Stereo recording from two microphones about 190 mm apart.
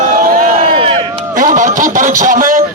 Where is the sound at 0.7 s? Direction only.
30° right (ahead or behind).